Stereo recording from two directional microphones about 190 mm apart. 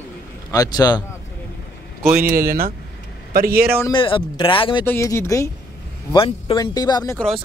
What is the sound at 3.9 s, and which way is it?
Speech, 25° left (ahead or behind).